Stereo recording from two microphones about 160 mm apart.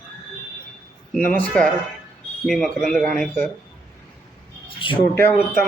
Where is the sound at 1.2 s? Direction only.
60° right (ahead or behind).